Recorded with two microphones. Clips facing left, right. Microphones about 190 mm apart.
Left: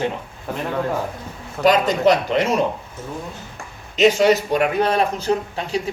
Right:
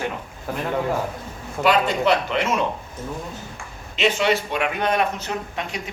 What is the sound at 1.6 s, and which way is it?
A man's voice, 40° left (ahead or behind).